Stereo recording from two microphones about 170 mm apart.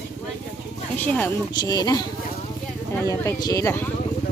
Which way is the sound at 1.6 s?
25° left (ahead or behind).